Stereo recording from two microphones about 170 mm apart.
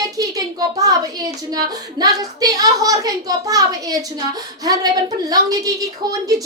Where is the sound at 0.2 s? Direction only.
20° right (ahead or behind).